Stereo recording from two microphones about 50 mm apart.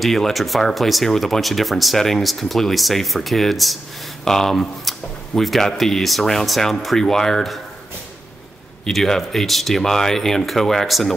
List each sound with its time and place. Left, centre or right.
0.0 s speech: centre
8.8 s speech: centre